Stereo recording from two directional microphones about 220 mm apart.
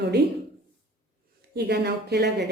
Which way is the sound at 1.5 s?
45° right (ahead or behind).